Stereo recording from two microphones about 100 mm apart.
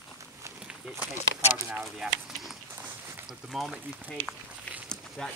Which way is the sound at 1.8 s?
Centre (ahead or behind).